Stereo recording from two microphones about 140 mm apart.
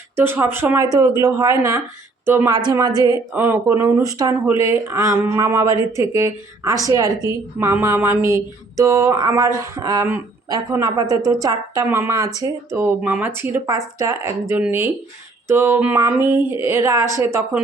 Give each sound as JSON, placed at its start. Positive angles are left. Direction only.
{"t": 0.2, "sound": "speech", "side_deg": -15}
{"t": 2.6, "sound": "speech", "side_deg": -30}
{"t": 3.3, "sound": "speech", "side_deg": -15}